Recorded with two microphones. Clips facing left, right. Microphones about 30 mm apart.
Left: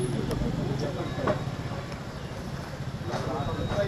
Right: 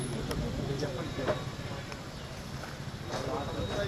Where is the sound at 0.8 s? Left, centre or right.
Centre.